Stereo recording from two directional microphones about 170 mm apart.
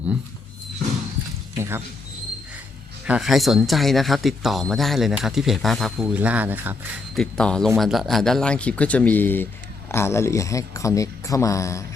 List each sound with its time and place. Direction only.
1.5 s a sound: 15° right (ahead or behind)
3.1 s speech: centre (ahead or behind)
7.2 s speech: 5° left (ahead or behind)